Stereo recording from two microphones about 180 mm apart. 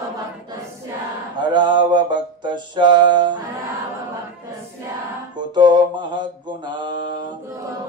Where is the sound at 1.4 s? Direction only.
25° right (ahead or behind).